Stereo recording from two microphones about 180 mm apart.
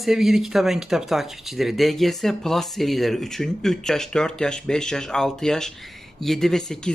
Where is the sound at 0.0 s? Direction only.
Centre (ahead or behind).